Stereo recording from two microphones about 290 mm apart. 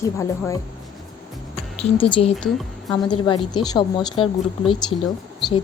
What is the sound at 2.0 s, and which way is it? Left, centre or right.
A woman's voice, centre.